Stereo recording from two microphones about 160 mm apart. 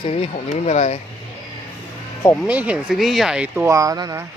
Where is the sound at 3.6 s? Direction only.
20° right (ahead or behind).